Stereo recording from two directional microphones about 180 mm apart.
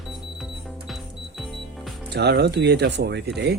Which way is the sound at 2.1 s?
65° right (ahead or behind).